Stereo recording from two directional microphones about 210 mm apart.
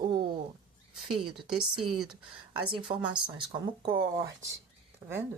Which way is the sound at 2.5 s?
25° right (ahead or behind).